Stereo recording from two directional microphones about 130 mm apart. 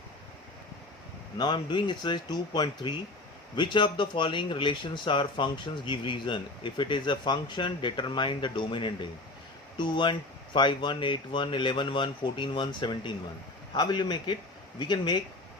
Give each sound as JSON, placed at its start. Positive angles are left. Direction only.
{"t": 1.4, "sound": "speech", "side_deg": 35}